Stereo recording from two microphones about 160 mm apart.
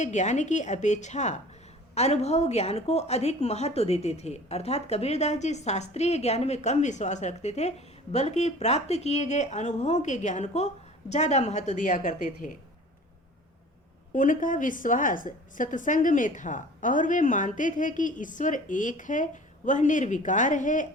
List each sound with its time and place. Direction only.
0.0 s a woman's voice: 50° left (ahead or behind)
14.1 s a woman's voice: 55° left (ahead or behind)